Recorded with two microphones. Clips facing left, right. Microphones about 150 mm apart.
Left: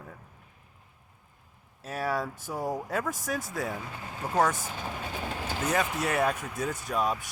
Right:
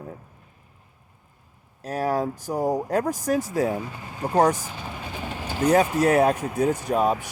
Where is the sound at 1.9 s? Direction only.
40° right (ahead or behind).